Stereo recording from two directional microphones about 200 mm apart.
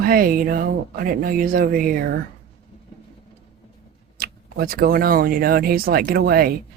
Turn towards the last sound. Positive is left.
turn(degrees=-50)  # may be behind; listen again after turning